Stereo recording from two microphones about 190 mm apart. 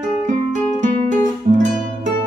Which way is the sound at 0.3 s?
40° right (ahead or behind).